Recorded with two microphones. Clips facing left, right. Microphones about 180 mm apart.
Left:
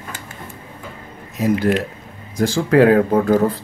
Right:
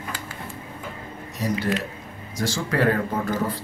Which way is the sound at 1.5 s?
60° left (ahead or behind).